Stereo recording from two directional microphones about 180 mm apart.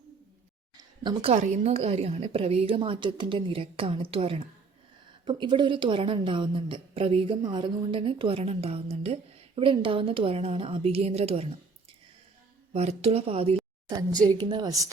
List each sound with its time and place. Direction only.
0.8 s a sound: 25° right (ahead or behind)
1.3 s a woman's voice: 40° right (ahead or behind)
12.7 s a woman's voice: 35° right (ahead or behind)